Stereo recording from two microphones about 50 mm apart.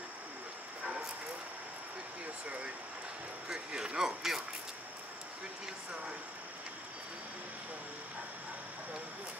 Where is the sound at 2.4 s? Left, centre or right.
Right.